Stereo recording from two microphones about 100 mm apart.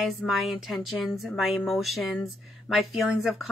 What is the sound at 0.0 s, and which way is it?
Speech, centre (ahead or behind).